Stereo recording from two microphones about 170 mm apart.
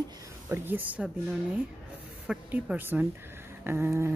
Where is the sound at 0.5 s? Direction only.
10° right (ahead or behind).